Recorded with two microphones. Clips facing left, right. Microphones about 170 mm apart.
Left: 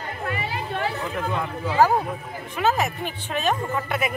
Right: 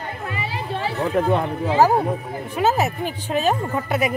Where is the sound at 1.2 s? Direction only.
55° right (ahead or behind).